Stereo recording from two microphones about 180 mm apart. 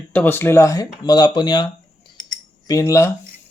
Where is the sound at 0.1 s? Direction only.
10° left (ahead or behind).